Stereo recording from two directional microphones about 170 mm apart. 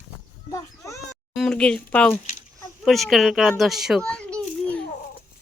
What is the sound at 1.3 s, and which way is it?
A child's voice, 5° left (ahead or behind).